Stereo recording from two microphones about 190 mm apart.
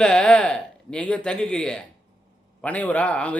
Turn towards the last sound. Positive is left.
turn(degrees=5)  # may be behind; listen again after turning